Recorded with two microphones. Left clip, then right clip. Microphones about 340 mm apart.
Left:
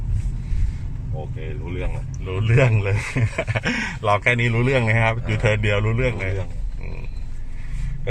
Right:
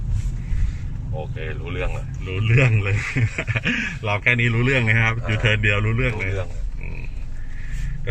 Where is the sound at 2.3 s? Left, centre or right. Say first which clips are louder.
Left 1 dB; centre.